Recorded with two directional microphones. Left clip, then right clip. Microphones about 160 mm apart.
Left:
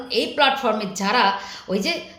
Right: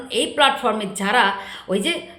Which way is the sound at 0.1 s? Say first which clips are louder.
Right 1 dB; 20° right (ahead or behind).